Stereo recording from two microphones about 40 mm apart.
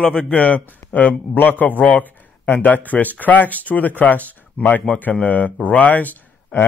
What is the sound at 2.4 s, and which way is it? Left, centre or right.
A man's voice, left.